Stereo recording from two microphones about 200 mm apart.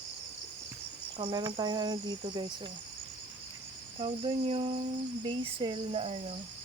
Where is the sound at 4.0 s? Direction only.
25° right (ahead or behind).